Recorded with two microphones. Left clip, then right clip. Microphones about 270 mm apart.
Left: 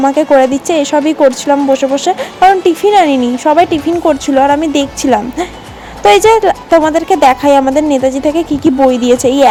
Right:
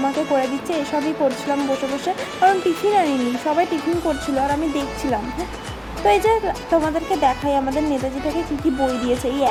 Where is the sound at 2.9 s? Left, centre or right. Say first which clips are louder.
Left 10 dB; left.